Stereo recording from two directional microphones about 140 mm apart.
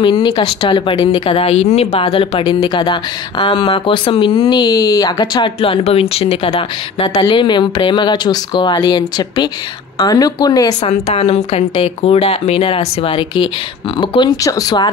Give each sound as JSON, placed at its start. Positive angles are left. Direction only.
{"t": 0.0, "sound": "speech", "side_deg": 35}
{"t": 5.6, "sound": "speech", "side_deg": 45}
{"t": 10.8, "sound": "speech", "side_deg": 50}